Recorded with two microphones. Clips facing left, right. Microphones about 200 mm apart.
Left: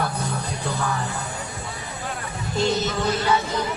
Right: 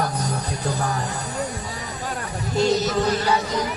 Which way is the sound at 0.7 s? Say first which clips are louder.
Right 1 dB; 35° right (ahead or behind).